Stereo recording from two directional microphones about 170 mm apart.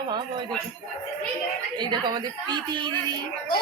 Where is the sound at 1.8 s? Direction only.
25° right (ahead or behind).